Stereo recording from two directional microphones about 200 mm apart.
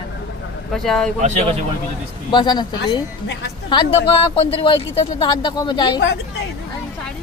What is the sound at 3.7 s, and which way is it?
Speech, 25° left (ahead or behind).